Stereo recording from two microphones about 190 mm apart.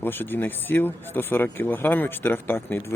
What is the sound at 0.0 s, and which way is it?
Speech, 10° left (ahead or behind).